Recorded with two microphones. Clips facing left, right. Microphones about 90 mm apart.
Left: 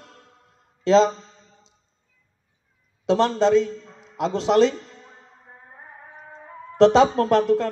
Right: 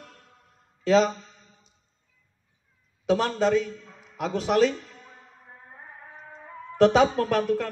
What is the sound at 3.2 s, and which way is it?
Speech, 25° left (ahead or behind).